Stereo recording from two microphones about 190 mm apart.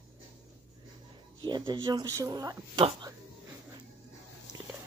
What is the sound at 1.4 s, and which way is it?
A woman's voice, 25° right (ahead or behind).